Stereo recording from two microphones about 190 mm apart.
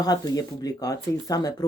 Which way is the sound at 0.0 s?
20° left (ahead or behind).